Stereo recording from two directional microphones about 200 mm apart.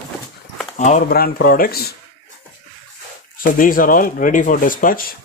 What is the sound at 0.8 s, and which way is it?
Speech, 45° left (ahead or behind).